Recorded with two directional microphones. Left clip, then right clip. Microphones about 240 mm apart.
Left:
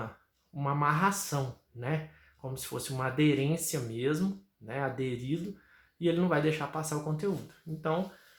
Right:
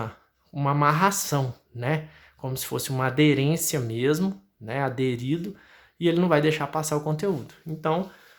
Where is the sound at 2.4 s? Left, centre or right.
Right.